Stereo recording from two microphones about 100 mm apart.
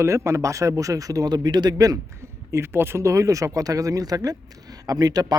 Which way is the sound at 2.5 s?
25° right (ahead or behind).